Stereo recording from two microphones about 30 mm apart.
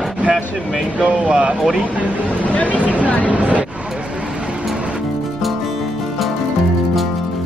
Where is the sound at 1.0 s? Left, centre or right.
Right.